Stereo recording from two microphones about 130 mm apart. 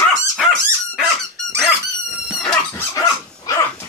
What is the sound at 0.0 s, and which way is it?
Dog, centre (ahead or behind).